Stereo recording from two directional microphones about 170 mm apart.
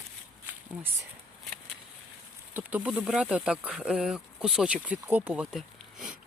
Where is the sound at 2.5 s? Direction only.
10° right (ahead or behind).